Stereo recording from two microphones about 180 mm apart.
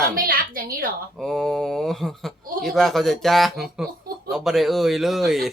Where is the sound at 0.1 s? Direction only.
50° right (ahead or behind).